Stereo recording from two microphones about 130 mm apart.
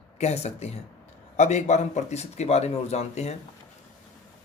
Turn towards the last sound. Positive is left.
turn(degrees=55)  # may be behind; listen again after turning